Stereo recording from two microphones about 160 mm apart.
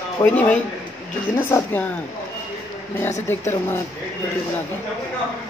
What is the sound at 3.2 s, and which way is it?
Speech, 15° left (ahead or behind).